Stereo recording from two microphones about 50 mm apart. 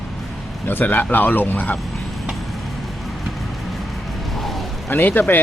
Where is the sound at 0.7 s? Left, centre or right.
Left.